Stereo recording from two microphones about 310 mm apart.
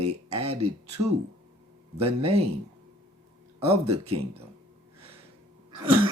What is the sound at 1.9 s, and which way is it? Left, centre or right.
Speech, centre.